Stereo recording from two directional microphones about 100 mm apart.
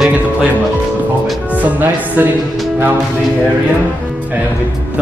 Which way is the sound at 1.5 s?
15° right (ahead or behind).